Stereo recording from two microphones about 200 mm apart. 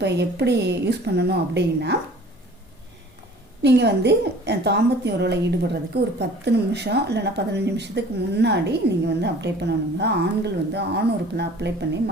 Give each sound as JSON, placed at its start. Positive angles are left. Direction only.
{"t": 0.0, "sound": "speech", "side_deg": -55}
{"t": 3.6, "sound": "speech", "side_deg": -55}